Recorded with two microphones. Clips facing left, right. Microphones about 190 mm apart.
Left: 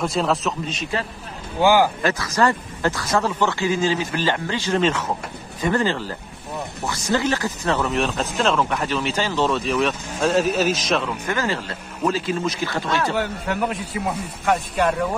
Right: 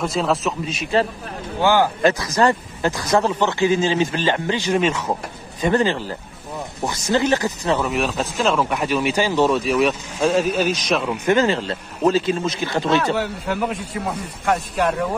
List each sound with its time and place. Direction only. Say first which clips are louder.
0.0 s a man's voice: right 1 dB; centre (ahead or behind)
1.6 s speech: left 1 dB; 10° left (ahead or behind)
2.0 s speech: right 3 dB; 20° right (ahead or behind); by 11.1 s centre (ahead or behind)
11.2 s speech: right 7 dB; 20° right (ahead or behind)
13.0 s a man's voice: right 1 dB; centre (ahead or behind)